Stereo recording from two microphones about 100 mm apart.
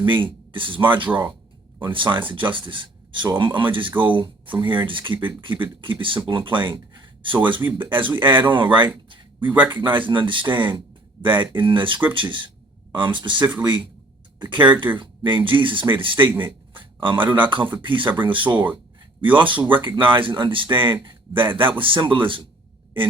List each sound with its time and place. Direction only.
0.0 s a man's voice: 55° right (ahead or behind)
9.0 s a sound: 55° right (ahead or behind)
9.6 s a man's voice: 55° right (ahead or behind)
16.4 s a sound: 55° right (ahead or behind)
17.3 s a man's voice: 55° right (ahead or behind)
18.5 s speech: 15° right (ahead or behind)
19.2 s a man's voice: 55° right (ahead or behind)